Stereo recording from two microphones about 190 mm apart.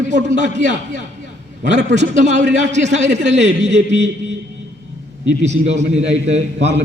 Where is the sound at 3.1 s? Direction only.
70° right (ahead or behind).